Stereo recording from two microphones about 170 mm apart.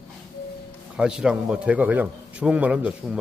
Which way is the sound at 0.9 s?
5° right (ahead or behind).